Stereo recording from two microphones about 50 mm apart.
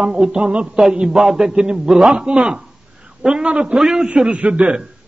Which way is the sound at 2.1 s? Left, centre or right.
Centre.